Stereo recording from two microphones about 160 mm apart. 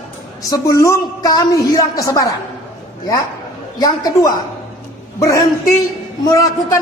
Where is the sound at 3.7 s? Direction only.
25° left (ahead or behind).